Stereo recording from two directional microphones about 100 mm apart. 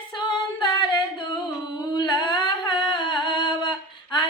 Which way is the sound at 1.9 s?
50° left (ahead or behind).